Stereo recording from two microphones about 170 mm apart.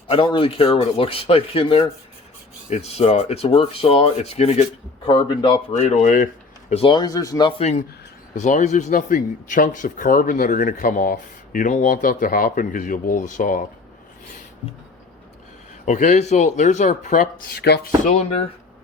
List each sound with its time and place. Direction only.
0.1 s speech: 30° left (ahead or behind)
5.0 s speech: 30° left (ahead or behind)
5.7 s speech: 45° left (ahead or behind)
6.7 s speech: 35° left (ahead or behind)
7.6 s speech: 45° left (ahead or behind)
15.9 s speech: 45° left (ahead or behind)
17.6 s speech: 70° left (ahead or behind)
18.0 s speech: 40° left (ahead or behind)